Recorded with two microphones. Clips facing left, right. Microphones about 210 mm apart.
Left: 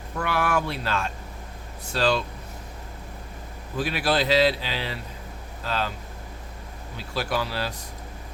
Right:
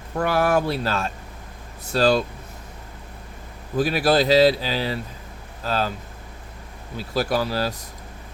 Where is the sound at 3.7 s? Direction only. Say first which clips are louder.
Right 6 dB; 40° right (ahead or behind).